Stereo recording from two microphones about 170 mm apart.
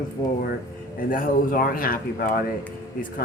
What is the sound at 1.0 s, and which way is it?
Speech, 55° left (ahead or behind).